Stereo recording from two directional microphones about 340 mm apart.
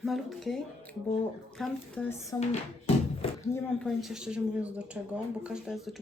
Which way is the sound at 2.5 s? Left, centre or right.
Centre.